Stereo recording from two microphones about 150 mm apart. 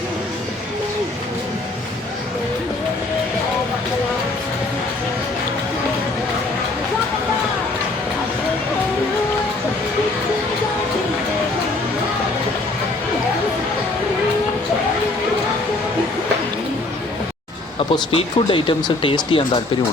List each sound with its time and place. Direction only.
17.7 s speech: 35° left (ahead or behind)